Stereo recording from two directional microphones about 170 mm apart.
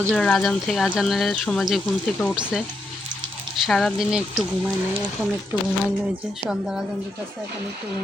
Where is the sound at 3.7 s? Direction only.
5° left (ahead or behind).